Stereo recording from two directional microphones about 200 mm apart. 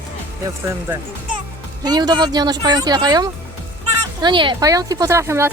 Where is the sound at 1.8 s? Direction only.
20° right (ahead or behind).